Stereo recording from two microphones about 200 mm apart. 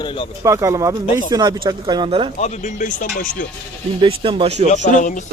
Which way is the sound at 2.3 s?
35° left (ahead or behind).